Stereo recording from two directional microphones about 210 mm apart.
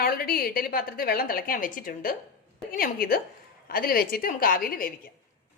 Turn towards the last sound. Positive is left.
turn(degrees=40)  # may be behind; listen again after turning